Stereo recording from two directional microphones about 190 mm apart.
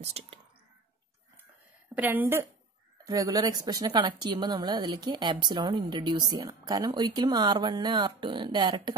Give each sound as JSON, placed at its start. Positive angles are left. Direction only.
{"t": 0.0, "sound": "speech", "side_deg": -35}
{"t": 2.0, "sound": "a woman's voice", "side_deg": -10}